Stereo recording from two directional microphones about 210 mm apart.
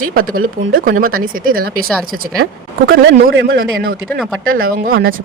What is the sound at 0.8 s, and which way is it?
Speech, 40° right (ahead or behind).